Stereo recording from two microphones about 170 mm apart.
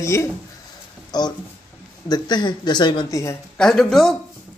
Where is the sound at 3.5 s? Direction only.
5° left (ahead or behind).